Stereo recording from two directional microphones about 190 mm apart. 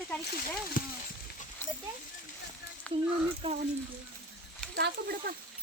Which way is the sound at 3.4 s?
25° right (ahead or behind).